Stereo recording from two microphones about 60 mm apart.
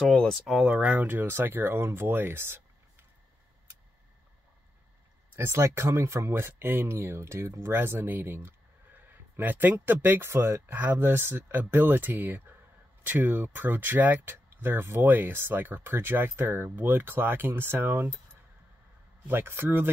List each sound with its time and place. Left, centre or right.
0.0 s speech: centre
0.7 s speech: right
5.3 s speech: right
19.2 s speech: right